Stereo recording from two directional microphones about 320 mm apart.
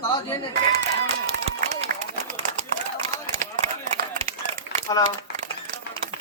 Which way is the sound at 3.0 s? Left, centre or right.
Right.